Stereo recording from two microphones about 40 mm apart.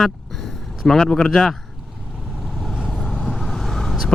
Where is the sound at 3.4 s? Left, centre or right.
Centre.